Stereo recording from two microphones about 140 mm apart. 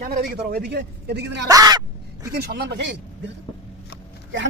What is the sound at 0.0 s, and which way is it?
Speech, 90° right.